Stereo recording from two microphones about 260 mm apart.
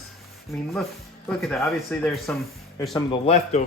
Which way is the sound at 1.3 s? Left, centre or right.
Centre.